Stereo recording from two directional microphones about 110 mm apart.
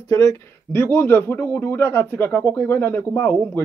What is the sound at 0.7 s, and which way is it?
Speech, 20° left (ahead or behind).